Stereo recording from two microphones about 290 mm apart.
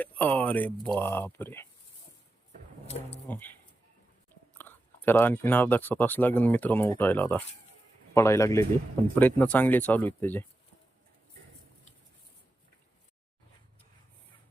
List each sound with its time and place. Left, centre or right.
0.0 s speech: centre
2.8 s speech: left
3.2 s speech: centre